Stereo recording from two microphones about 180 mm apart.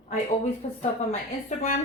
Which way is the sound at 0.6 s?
40° left (ahead or behind).